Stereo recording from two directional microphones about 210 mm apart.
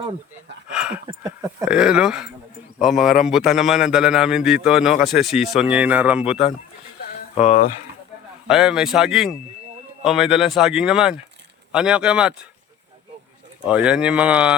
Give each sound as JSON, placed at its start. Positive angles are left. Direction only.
{"t": 0.7, "sound": "a sound", "side_deg": -5}
{"t": 1.0, "sound": "a man's voice", "side_deg": -15}
{"t": 7.3, "sound": "speech", "side_deg": 35}
{"t": 8.4, "sound": "a man's voice", "side_deg": -5}
{"t": 13.7, "sound": "a man's voice", "side_deg": -5}